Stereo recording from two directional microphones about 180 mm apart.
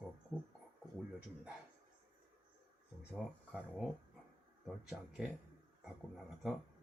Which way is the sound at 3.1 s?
5° left (ahead or behind).